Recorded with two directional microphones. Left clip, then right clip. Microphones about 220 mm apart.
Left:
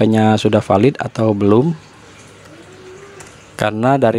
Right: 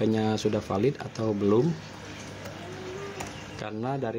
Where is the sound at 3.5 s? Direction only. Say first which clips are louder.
Left 18 dB; 50° left (ahead or behind).